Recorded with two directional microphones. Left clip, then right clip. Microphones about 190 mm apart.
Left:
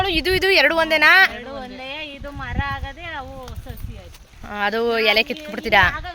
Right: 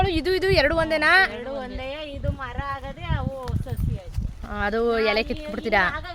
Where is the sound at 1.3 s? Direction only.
55° right (ahead or behind).